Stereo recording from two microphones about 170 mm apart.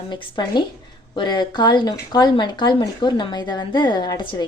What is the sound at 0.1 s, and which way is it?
Speech, 25° left (ahead or behind).